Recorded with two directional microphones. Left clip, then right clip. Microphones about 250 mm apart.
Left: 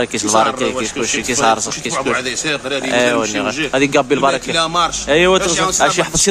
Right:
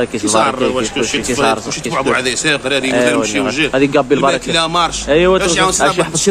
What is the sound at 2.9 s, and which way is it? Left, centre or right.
Speech, centre.